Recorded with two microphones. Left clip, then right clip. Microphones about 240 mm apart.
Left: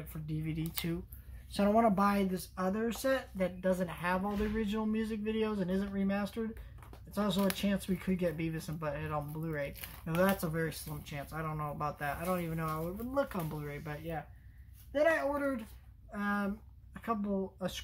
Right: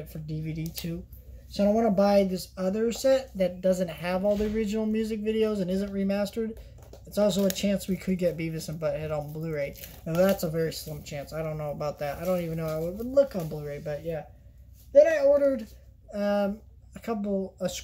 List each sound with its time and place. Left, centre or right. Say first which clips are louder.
0.1 s a woman's voice: right 3 dB; centre
2.0 s speech: right 9 dB; centre